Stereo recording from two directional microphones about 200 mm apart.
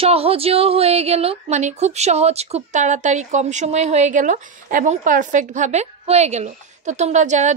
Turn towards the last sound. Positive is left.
turn(degrees=-35)  # may be behind; listen again after turning